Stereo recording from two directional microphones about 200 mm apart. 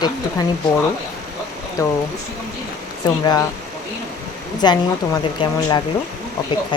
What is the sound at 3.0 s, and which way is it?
Speech, 20° left (ahead or behind).